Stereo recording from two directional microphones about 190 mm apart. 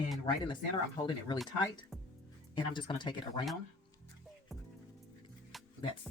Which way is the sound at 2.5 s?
25° left (ahead or behind).